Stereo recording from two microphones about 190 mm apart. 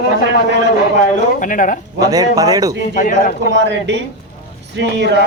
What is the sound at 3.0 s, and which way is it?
Speech, 45° left (ahead or behind).